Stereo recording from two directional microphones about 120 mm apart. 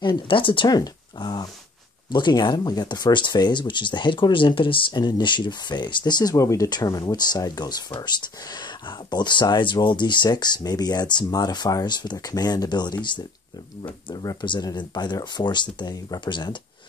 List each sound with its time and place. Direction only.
0.0 s speech: 45° left (ahead or behind)